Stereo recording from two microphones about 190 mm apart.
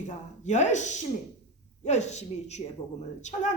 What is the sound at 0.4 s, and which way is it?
A woman's voice, 40° left (ahead or behind).